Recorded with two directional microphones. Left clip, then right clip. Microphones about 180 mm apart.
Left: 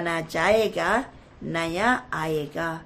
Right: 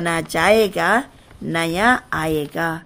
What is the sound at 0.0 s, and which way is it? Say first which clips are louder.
Speech: right 6 dB; 60° right (ahead or behind).